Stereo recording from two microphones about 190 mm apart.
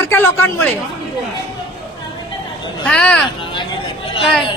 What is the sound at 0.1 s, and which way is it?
Speech, 10° left (ahead or behind).